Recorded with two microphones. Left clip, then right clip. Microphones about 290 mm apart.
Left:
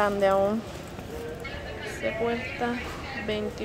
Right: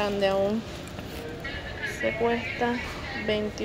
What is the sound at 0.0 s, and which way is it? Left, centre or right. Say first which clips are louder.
Speech: left 2 dB; centre.